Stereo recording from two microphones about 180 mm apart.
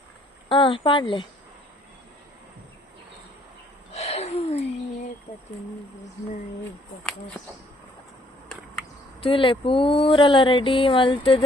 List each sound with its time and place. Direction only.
0.4 s speech: 30° left (ahead or behind)
3.9 s a sound: 35° left (ahead or behind)
9.2 s speech: 30° left (ahead or behind)